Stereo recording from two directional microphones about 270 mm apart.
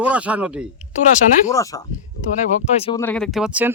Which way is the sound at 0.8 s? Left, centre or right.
Left.